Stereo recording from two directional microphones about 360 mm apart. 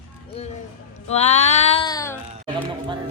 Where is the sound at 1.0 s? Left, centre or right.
Centre.